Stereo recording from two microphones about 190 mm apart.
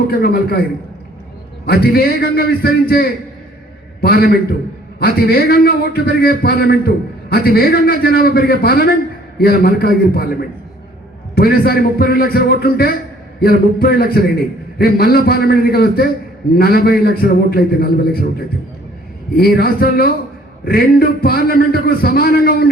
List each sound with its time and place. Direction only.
0.1 s a man's voice: 55° left (ahead or behind)
1.6 s a man's voice: 55° left (ahead or behind)
11.3 s a man's voice: 55° left (ahead or behind)